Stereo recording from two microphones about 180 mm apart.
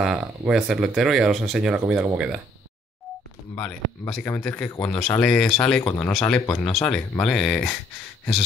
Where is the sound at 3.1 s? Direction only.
Centre (ahead or behind).